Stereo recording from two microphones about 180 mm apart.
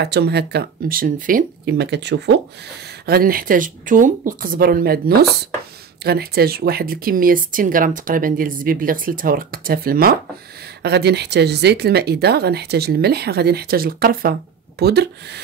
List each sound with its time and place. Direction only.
0.0 s speech: 65° right (ahead or behind)
3.1 s speech: 55° right (ahead or behind)
10.8 s speech: 65° right (ahead or behind)